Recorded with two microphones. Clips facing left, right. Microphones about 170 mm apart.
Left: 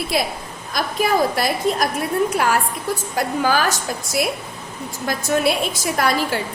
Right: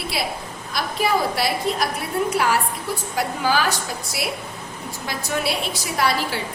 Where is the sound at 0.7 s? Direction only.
45° left (ahead or behind).